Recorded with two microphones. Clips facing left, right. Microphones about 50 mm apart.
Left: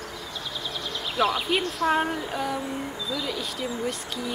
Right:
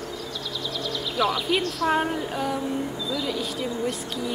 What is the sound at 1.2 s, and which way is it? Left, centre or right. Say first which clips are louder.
Speech: even; centre.